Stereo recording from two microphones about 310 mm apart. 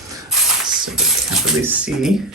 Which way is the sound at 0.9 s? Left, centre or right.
Centre.